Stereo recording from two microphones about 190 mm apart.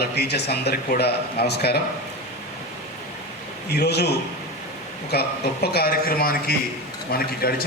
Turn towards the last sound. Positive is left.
turn(degrees=50)  # may be behind; listen again after turning